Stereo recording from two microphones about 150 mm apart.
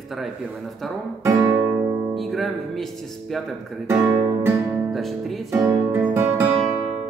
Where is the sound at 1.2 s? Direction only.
15° right (ahead or behind).